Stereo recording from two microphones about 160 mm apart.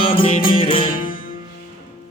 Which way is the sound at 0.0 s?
35° left (ahead or behind).